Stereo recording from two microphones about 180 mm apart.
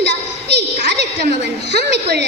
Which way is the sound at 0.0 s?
70° right (ahead or behind).